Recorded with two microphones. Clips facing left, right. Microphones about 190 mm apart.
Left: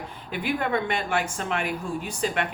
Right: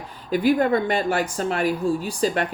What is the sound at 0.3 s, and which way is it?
A woman's voice, 40° right (ahead or behind).